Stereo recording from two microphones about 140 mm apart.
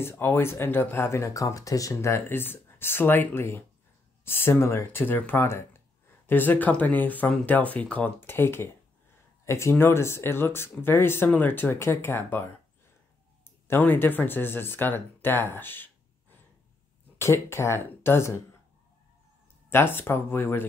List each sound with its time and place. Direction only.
0.0 s speech: 15° left (ahead or behind)
19.7 s speech: 15° left (ahead or behind)